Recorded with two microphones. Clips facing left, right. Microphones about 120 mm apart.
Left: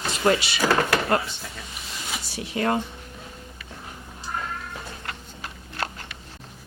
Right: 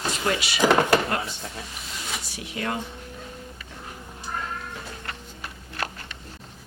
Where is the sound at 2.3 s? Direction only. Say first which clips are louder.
Left 7 dB; 35° left (ahead or behind).